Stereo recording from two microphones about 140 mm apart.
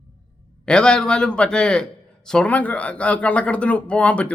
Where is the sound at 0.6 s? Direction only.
5° left (ahead or behind).